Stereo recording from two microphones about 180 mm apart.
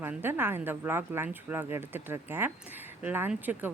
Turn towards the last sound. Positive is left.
turn(degrees=-10)  # may be behind; listen again after turning